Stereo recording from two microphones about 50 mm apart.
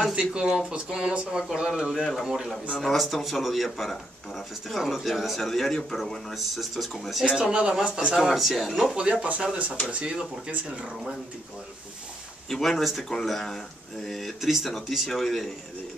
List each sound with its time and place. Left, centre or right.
0.1 s speech: right
1.7 s speech: centre
2.2 s speech: centre
2.8 s speech: centre
6.3 s speech: centre
7.3 s speech: centre
8.2 s speech: centre
8.9 s speech: right
12.4 s speech: centre